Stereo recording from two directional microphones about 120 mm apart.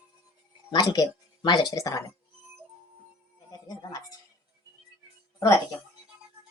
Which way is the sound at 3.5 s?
30° left (ahead or behind).